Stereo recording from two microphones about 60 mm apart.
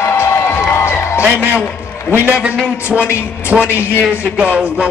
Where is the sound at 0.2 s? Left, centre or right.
Left.